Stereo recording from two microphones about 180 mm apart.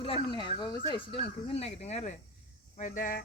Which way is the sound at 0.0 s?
30° left (ahead or behind).